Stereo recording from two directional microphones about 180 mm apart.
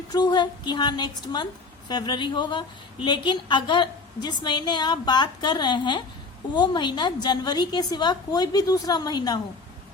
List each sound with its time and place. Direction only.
0.1 s a woman's voice: 25° left (ahead or behind)